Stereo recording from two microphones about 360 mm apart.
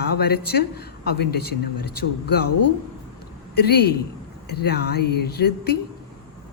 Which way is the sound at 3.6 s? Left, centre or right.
Left.